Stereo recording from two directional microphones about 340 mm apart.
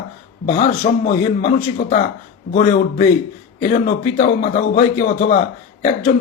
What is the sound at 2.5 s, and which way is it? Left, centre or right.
Speech, left.